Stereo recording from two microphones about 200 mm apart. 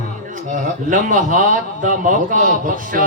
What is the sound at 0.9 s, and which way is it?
A man's voice, 40° right (ahead or behind).